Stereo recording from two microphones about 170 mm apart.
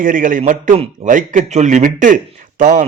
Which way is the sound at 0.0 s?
50° right (ahead or behind).